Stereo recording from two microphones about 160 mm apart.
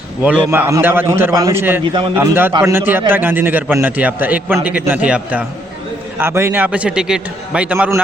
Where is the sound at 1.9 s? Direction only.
30° right (ahead or behind).